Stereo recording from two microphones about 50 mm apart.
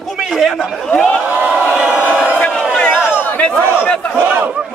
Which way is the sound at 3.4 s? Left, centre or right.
Left.